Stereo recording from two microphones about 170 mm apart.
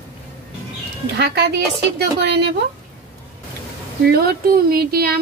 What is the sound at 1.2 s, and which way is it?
A woman's voice, 80° right.